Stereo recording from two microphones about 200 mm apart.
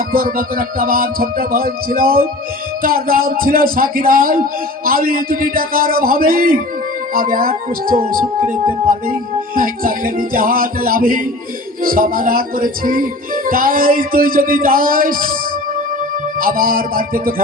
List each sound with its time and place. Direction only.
0.1 s music: 45° right (ahead or behind)
9.6 s music: 45° right (ahead or behind)
16.4 s music: 45° right (ahead or behind)